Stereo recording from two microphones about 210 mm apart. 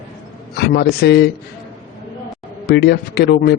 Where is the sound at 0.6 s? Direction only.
50° left (ahead or behind).